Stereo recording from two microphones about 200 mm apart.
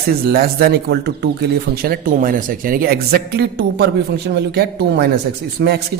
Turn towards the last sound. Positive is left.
turn(degrees=-65)  # may be behind; listen again after turning